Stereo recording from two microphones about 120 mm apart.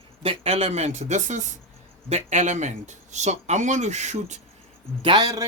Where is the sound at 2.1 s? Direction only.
75° right (ahead or behind).